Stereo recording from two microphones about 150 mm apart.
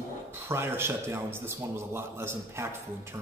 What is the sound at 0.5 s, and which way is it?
A man's voice, 15° right (ahead or behind).